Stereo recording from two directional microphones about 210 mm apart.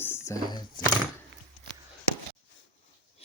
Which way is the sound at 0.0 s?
10° left (ahead or behind).